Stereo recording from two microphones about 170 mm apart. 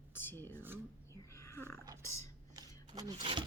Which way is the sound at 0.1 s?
10° left (ahead or behind).